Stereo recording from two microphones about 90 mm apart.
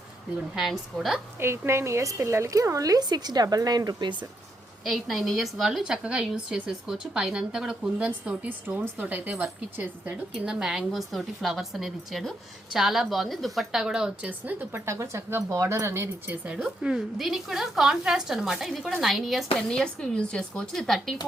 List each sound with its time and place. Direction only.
0.5 s a woman's voice: 5° right (ahead or behind)
1.4 s speech: 30° right (ahead or behind); by 4.2 s 50° right (ahead or behind)
4.8 s a woman's voice: centre (ahead or behind); by 9.8 s 20° right (ahead or behind)
10.3 s a woman's voice: 5° right (ahead or behind)
14.3 s speech: 20° right (ahead or behind)
14.8 s speech: 35° right (ahead or behind)
16.5 s a woman's voice: 10° right (ahead or behind)